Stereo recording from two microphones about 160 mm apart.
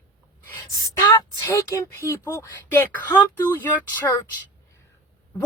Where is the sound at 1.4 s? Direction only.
20° left (ahead or behind).